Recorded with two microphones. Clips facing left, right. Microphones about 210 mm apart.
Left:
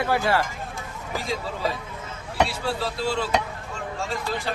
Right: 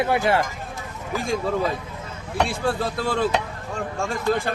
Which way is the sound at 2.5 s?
50° right (ahead or behind).